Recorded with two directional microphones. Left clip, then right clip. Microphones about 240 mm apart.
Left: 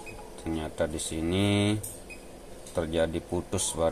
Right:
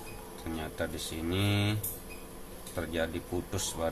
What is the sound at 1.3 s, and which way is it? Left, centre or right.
Speech, left.